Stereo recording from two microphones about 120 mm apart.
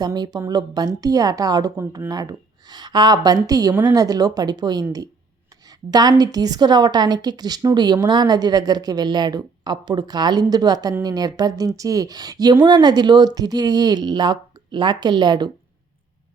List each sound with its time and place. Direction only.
0.0 s speech: 35° right (ahead or behind)